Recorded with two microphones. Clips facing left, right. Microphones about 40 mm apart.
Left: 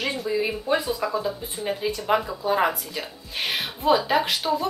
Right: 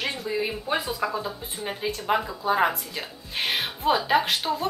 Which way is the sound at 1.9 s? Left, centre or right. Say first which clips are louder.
Left 1 dB; centre.